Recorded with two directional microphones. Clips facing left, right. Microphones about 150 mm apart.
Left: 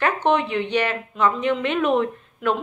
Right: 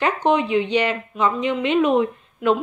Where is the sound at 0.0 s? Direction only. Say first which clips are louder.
Right 1 dB; 10° right (ahead or behind).